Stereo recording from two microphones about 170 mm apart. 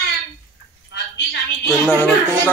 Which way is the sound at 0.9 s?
80° left.